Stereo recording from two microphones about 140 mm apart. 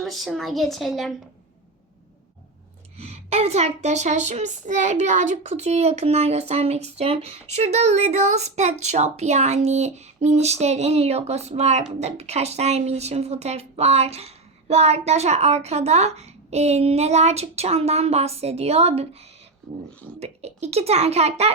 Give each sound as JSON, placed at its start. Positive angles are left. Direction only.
{"t": 0.0, "sound": "a woman's voice", "side_deg": 0}
{"t": 3.0, "sound": "speech", "side_deg": -45}
{"t": 20.1, "sound": "speech", "side_deg": -50}